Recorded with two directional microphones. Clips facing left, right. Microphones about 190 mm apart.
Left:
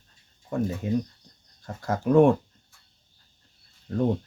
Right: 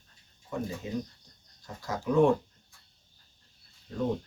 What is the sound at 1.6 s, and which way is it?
Speech, 55° left (ahead or behind).